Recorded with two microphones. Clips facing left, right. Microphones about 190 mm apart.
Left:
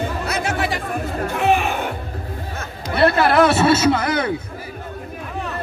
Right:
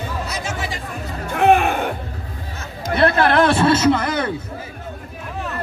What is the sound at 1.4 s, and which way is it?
Music, 55° right (ahead or behind).